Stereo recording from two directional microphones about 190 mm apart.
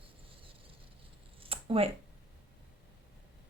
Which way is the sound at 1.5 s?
30° right (ahead or behind).